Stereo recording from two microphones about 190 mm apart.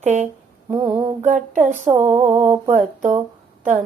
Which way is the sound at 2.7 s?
40° right (ahead or behind).